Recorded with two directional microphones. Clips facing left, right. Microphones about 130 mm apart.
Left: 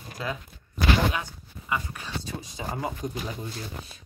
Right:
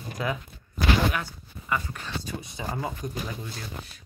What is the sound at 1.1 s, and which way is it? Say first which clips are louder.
Speech: right 1 dB; 15° left (ahead or behind).